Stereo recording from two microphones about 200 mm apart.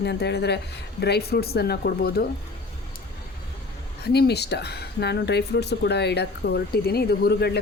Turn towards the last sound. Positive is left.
turn(degrees=55)  # may be behind; listen again after turning